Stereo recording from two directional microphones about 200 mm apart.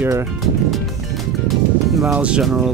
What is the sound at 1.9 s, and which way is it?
Speech, centre (ahead or behind).